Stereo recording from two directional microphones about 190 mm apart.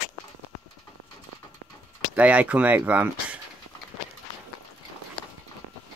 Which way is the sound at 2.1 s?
5° right (ahead or behind).